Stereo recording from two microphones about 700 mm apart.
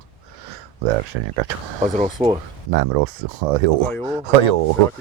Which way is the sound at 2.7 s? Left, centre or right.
Right.